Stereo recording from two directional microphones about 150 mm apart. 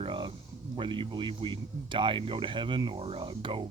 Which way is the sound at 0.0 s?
35° right (ahead or behind).